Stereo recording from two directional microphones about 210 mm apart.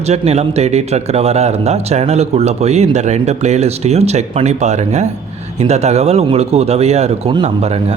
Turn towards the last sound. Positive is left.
turn(degrees=-30)  # may be behind; listen again after turning